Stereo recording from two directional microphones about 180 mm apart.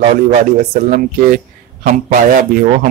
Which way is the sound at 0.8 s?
45° right (ahead or behind).